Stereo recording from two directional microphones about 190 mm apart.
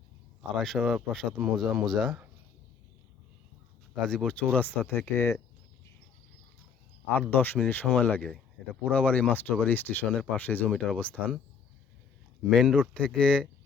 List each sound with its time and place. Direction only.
0.5 s speech: centre (ahead or behind)
4.0 s speech: 5° left (ahead or behind)
7.2 s speech: 10° left (ahead or behind)
12.5 s speech: 5° left (ahead or behind)